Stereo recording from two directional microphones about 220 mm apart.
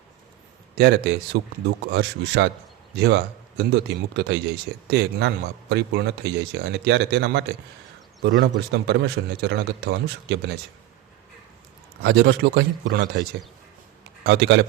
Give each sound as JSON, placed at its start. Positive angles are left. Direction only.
{"t": 0.8, "sound": "speech", "side_deg": -45}
{"t": 12.0, "sound": "speech", "side_deg": -50}
{"t": 14.3, "sound": "speech", "side_deg": -50}